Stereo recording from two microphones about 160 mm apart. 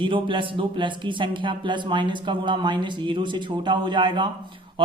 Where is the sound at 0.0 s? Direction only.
30° right (ahead or behind).